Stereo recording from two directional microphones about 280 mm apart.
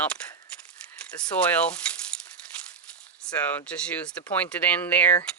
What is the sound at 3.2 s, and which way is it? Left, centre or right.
Speech, centre.